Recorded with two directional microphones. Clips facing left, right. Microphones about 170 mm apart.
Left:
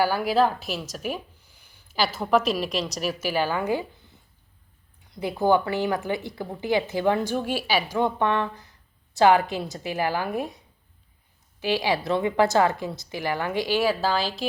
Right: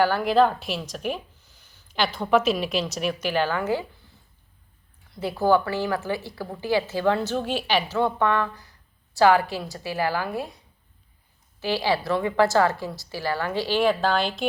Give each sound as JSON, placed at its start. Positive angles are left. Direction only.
{"t": 0.0, "sound": "a woman's voice", "side_deg": 5}
{"t": 5.1, "sound": "a woman's voice", "side_deg": 20}
{"t": 11.6, "sound": "speech", "side_deg": 15}